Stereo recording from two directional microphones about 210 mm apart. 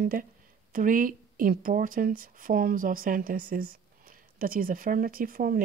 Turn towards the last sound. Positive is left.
turn(degrees=-45)  # may be behind; listen again after turning